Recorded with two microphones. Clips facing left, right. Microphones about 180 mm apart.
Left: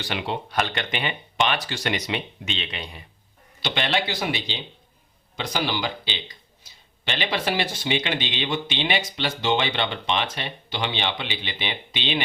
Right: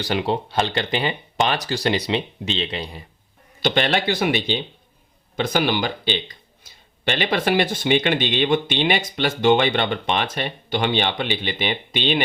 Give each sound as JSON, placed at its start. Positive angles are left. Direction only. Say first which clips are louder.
{"t": 0.0, "sound": "speech", "louder": "right 6 dB", "side_deg": -40}
{"t": 3.6, "sound": "speech", "louder": "right 5 dB", "side_deg": -45}